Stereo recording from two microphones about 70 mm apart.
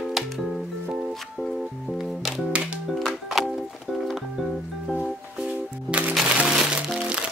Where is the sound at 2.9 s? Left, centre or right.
Centre.